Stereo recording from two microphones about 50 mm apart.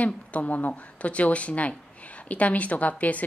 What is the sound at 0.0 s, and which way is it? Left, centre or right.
Speech, left.